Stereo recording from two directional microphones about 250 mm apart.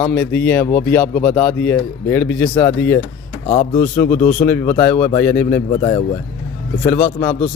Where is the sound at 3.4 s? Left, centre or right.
Left.